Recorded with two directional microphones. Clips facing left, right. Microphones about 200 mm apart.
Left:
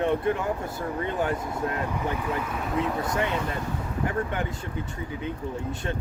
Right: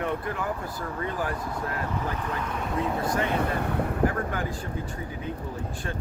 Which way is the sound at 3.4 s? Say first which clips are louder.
Right 4 dB; 60° right (ahead or behind).